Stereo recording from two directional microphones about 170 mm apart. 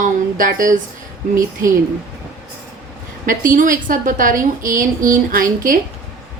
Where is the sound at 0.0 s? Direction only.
50° right (ahead or behind).